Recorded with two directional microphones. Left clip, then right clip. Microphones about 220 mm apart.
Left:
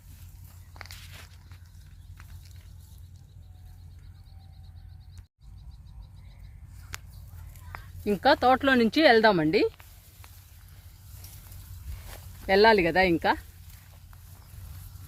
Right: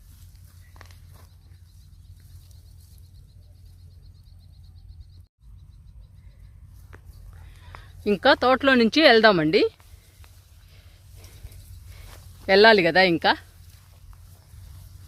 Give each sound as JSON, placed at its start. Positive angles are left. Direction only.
{"t": 8.0, "sound": "speech", "side_deg": -50}
{"t": 12.5, "sound": "speech", "side_deg": -50}